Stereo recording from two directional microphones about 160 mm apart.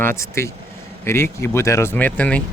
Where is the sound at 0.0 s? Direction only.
15° left (ahead or behind).